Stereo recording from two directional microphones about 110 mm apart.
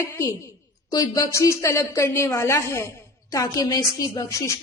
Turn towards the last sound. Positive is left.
turn(degrees=30)  # may be behind; listen again after turning